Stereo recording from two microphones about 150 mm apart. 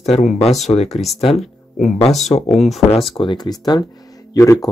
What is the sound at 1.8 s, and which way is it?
Speech, 50° left (ahead or behind).